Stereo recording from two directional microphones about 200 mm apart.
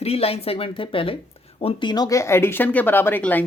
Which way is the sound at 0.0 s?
30° left (ahead or behind).